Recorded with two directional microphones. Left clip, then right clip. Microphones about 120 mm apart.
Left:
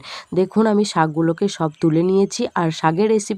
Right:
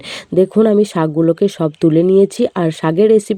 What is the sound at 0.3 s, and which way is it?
Speech, 25° right (ahead or behind).